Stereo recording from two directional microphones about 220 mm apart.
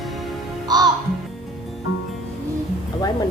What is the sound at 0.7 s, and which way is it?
Music, 20° right (ahead or behind).